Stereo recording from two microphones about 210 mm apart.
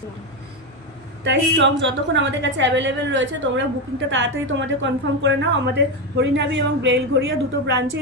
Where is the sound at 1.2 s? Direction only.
60° right (ahead or behind).